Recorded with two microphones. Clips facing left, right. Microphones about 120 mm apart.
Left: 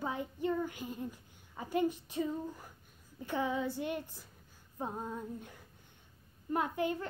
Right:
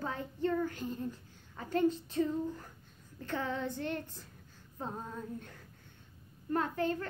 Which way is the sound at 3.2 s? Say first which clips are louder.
Left 2 dB; 15° left (ahead or behind).